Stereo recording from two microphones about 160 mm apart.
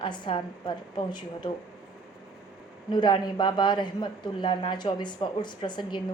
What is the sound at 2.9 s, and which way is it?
A man's voice, 30° left (ahead or behind).